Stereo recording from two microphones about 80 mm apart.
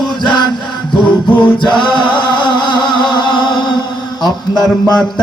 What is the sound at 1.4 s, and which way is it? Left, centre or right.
Music, left.